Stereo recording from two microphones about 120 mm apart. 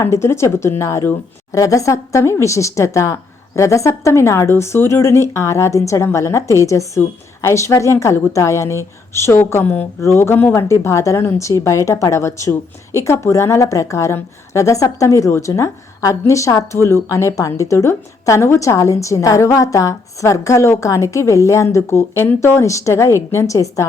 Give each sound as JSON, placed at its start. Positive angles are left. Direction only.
{"t": 0.0, "sound": "speech", "side_deg": 20}